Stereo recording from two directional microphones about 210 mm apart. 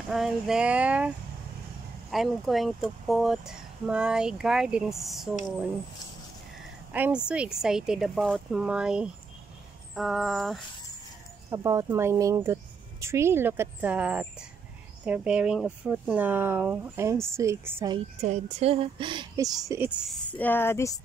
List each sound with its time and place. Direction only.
0.1 s speech: centre (ahead or behind)
6.9 s speech: 5° right (ahead or behind)
11.5 s speech: 15° right (ahead or behind)
17.9 s speech: 30° right (ahead or behind); by 19.9 s 15° right (ahead or behind)
20.0 s speech: 5° left (ahead or behind)